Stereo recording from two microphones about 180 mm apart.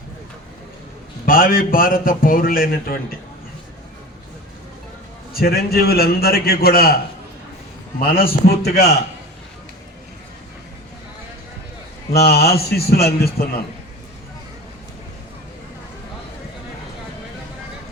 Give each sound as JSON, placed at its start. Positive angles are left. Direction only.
{"t": 1.2, "sound": "a man's voice", "side_deg": 50}
{"t": 5.3, "sound": "a man's voice", "side_deg": 60}
{"t": 12.1, "sound": "a man's voice", "side_deg": 60}